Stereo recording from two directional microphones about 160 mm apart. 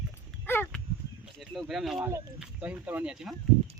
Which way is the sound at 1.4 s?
Centre (ahead or behind).